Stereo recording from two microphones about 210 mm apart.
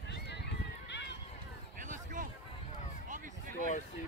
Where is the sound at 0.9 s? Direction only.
55° left (ahead or behind).